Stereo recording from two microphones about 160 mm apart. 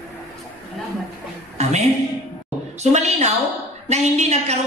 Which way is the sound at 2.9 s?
45° right (ahead or behind).